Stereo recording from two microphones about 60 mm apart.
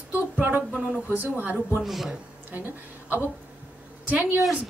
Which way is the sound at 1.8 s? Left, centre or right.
Centre.